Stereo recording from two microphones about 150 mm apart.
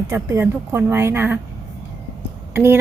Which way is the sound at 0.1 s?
15° right (ahead or behind).